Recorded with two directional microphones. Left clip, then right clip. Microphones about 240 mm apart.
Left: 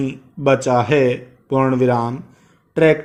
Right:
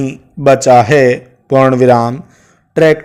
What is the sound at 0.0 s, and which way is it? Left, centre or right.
A man's voice, right.